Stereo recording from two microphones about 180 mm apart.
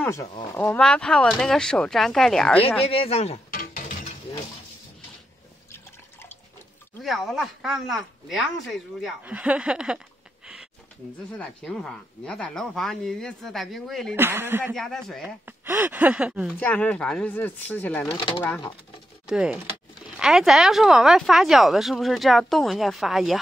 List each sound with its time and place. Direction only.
0.0 s speech: 15° left (ahead or behind); by 2.6 s centre (ahead or behind)
2.8 s speech: 30° left (ahead or behind)
7.0 s speech: centre (ahead or behind)
14.1 s speech: 10° right (ahead or behind)
14.7 s speech: centre (ahead or behind)
15.4 s speech: 10° right (ahead or behind)
16.5 s speech: 10° left (ahead or behind)
18.1 s speech: 30° left (ahead or behind)
19.2 s speech: 5° right (ahead or behind)